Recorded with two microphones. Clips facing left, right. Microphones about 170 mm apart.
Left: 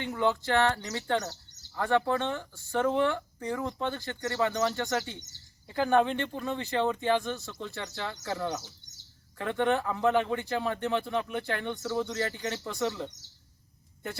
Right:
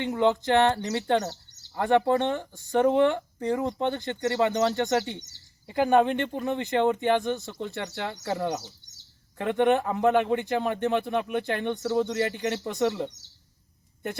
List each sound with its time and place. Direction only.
0.0 s speech: 20° right (ahead or behind)